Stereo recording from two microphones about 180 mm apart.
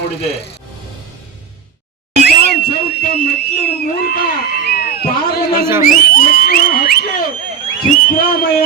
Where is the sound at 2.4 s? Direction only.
60° left (ahead or behind).